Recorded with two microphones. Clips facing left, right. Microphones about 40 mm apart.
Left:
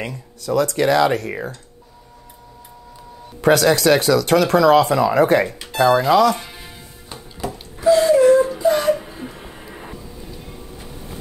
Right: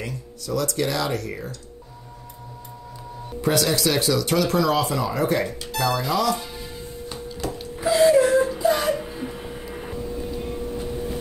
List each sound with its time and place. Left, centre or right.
0.0 s speech: left
3.3 s speech: left
7.1 s music: centre
7.8 s a sound: centre